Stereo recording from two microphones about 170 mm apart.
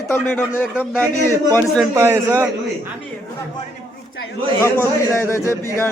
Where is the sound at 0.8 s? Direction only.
5° right (ahead or behind).